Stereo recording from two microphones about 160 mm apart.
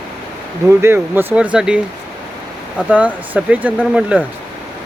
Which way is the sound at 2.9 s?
10° right (ahead or behind).